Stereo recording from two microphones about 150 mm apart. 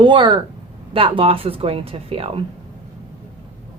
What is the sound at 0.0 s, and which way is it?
A woman's voice, 30° right (ahead or behind).